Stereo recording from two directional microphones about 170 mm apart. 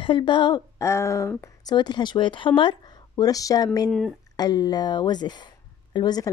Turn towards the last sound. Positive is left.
turn(degrees=25)  # may be behind; listen again after turning